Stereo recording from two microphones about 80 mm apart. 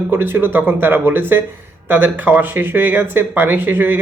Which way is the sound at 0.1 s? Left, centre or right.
Right.